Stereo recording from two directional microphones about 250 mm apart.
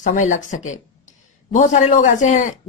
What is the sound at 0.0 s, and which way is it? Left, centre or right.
Speech, left.